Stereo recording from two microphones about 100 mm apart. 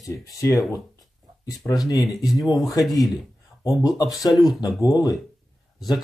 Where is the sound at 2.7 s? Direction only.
40° left (ahead or behind).